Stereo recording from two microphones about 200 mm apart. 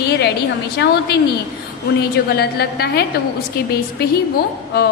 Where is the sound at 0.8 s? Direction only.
55° left (ahead or behind).